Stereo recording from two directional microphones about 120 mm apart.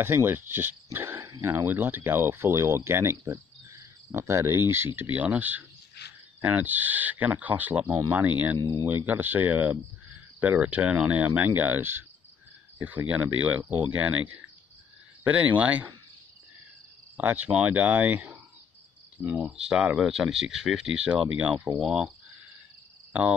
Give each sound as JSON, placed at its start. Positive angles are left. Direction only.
{"t": 0.0, "sound": "speech", "side_deg": -20}
{"t": 17.2, "sound": "speech", "side_deg": -15}